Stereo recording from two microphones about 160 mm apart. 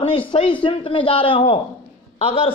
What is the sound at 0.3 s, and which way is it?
A man's voice, 30° left (ahead or behind).